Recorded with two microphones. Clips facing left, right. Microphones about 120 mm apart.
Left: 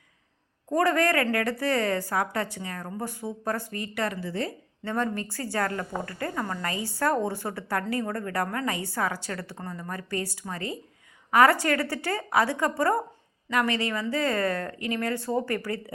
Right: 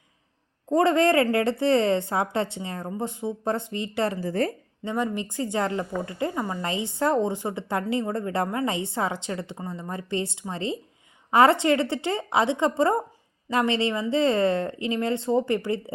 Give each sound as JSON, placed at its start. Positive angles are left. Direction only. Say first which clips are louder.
{"t": 0.7, "sound": "a woman's voice", "louder": "right 4 dB", "side_deg": -25}
{"t": 4.3, "sound": "a woman's voice", "louder": "right 6 dB", "side_deg": -50}
{"t": 4.8, "sound": "a woman's voice", "louder": "right 1 dB", "side_deg": -15}